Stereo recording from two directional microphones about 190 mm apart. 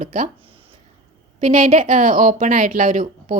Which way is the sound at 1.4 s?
45° right (ahead or behind).